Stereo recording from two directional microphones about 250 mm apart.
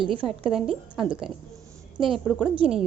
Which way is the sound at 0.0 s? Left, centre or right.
Right.